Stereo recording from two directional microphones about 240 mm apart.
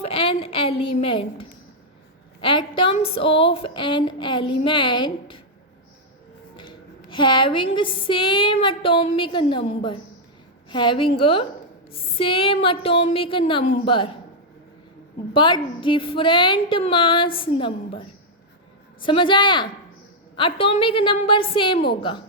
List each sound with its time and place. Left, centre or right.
0.0 s a sound: left
2.4 s a woman's voice: left
7.1 s a woman's voice: centre
15.3 s a woman's voice: centre
19.0 s a woman's voice: left